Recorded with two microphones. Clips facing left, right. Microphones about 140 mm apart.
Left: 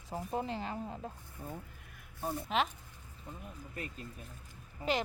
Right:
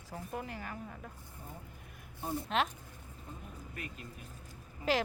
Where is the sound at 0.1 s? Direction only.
25° left (ahead or behind).